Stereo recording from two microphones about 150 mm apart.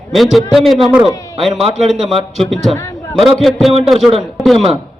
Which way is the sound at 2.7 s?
20° left (ahead or behind).